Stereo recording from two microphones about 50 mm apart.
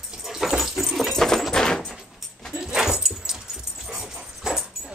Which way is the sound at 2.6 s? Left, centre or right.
Centre.